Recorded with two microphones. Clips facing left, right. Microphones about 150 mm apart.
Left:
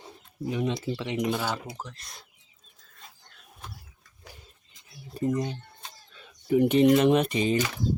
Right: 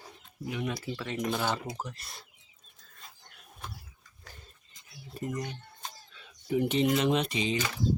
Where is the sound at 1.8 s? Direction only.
5° right (ahead or behind).